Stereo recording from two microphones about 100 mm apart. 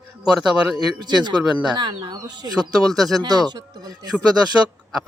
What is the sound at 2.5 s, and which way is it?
Speech, centre (ahead or behind).